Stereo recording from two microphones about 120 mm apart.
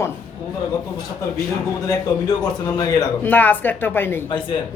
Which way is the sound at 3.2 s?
15° left (ahead or behind).